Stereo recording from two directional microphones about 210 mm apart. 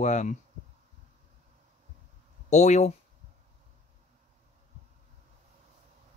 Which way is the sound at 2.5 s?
35° left (ahead or behind).